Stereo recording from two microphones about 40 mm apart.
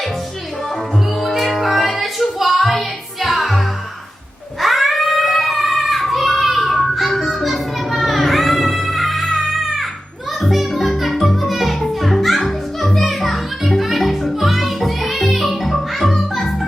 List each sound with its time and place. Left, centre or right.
1.4 s music: centre
4.6 s cat: centre
7.1 s music: centre